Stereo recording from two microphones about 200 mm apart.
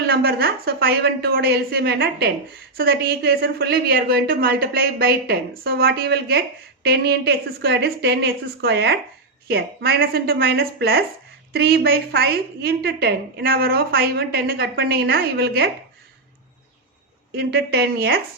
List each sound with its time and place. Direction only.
0.0 s a woman's voice: 50° right (ahead or behind)
17.3 s a woman's voice: 55° right (ahead or behind)